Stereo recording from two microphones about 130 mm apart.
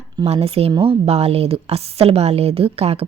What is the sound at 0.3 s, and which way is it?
A woman's voice, 50° right (ahead or behind).